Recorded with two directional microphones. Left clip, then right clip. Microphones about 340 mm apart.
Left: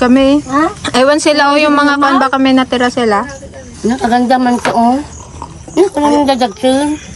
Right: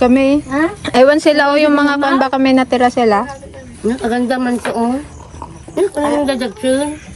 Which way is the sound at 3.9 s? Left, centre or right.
Left.